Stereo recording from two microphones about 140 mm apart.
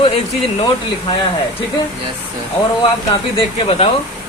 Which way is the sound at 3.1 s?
40° left (ahead or behind).